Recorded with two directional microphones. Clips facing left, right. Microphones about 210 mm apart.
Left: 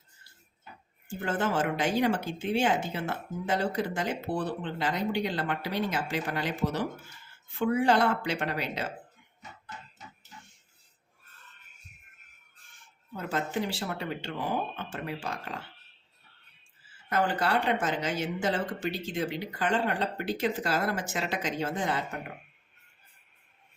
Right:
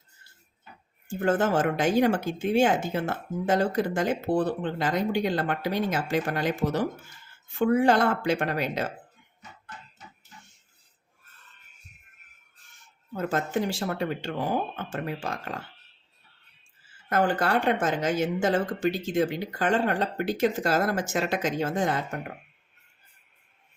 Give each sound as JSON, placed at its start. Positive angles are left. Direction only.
{"t": 1.2, "sound": "speech", "side_deg": -45}
{"t": 13.1, "sound": "speech", "side_deg": -45}
{"t": 17.1, "sound": "speech", "side_deg": -50}